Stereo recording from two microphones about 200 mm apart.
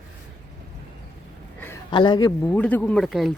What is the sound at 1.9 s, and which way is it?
Speech, 25° left (ahead or behind).